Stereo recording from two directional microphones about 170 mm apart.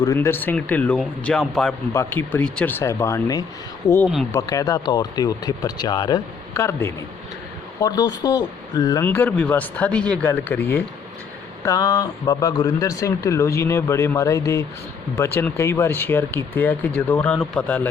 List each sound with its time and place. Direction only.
0.0 s speech: 15° left (ahead or behind)
1.9 s speech: 15° left (ahead or behind)
9.0 s speech: 10° left (ahead or behind)